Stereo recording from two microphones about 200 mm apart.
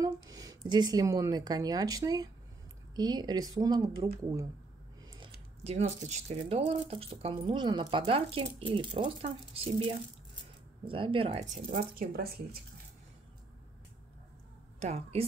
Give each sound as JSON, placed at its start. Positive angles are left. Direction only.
{"t": 0.0, "sound": "a sound", "side_deg": -15}
{"t": 0.7, "sound": "speech", "side_deg": -20}
{"t": 5.6, "sound": "speech", "side_deg": -35}
{"t": 14.8, "sound": "speech", "side_deg": -30}